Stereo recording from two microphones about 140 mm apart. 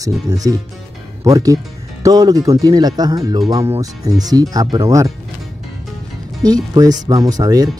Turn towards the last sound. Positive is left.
turn(degrees=-25)  # may be behind; listen again after turning